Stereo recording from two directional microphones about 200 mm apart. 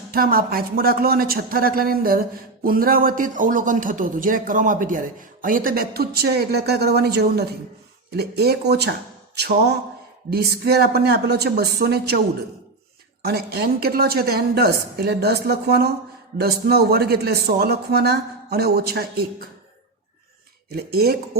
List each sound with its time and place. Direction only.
0.1 s a man's voice: 45° right (ahead or behind)
13.2 s a man's voice: 50° right (ahead or behind)
20.7 s a man's voice: 50° right (ahead or behind)